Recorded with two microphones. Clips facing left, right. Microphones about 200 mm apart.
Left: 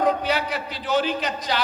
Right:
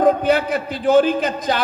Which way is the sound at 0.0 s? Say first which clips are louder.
Right 7 dB; 50° right (ahead or behind).